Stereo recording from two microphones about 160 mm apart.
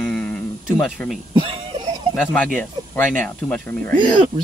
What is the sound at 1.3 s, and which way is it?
Speech, 30° right (ahead or behind).